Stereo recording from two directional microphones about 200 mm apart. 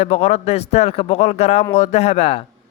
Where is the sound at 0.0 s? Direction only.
30° left (ahead or behind).